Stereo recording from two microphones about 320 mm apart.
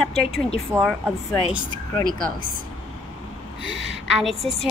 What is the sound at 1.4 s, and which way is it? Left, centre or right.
Speech, centre.